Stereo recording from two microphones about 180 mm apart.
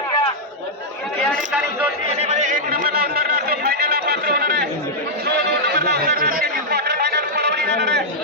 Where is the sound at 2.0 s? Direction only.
35° right (ahead or behind); by 8.0 s 70° right (ahead or behind).